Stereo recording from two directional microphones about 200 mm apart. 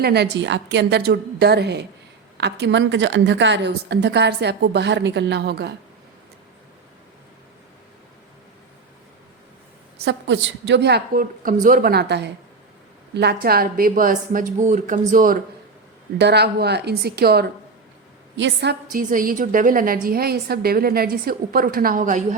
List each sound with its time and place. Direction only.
0.0 s a woman's voice: 55° right (ahead or behind)
10.0 s a woman's voice: 60° right (ahead or behind); by 15.4 s 40° right (ahead or behind)
16.1 s a woman's voice: 55° right (ahead or behind); by 22.4 s 40° right (ahead or behind)